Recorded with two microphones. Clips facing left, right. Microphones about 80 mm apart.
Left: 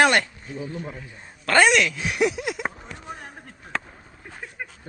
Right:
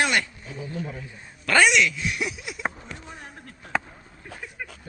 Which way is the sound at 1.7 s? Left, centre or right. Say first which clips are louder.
Left 1 dB; left.